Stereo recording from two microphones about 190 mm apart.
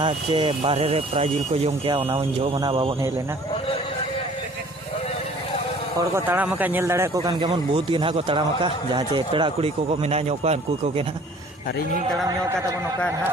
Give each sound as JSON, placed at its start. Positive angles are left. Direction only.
{"t": 0.0, "sound": "speech", "side_deg": -25}
{"t": 6.0, "sound": "speech", "side_deg": -10}